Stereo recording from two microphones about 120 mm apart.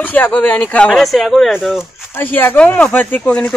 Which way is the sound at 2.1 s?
15° left (ahead or behind).